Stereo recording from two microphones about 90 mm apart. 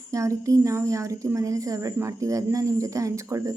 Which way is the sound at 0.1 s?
35° right (ahead or behind).